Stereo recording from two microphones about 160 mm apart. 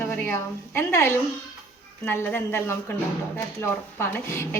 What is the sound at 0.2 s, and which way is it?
Speech, 15° left (ahead or behind).